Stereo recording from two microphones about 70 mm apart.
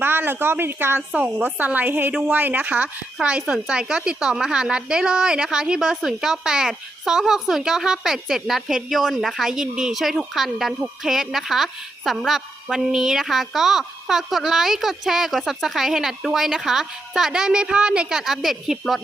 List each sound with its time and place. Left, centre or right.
0.0 s speech: right
1.1 s a woman's voice: right; by 18.9 s centre